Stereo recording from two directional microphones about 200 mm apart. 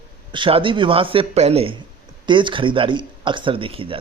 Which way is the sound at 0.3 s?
25° right (ahead or behind).